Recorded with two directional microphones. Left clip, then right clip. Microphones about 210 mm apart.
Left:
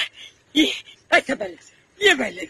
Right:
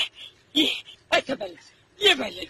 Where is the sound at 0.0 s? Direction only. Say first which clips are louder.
Left 1 dB; 45° left (ahead or behind).